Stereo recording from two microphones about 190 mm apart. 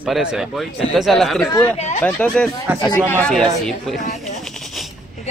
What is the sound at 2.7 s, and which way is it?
Speech, 10° right (ahead or behind).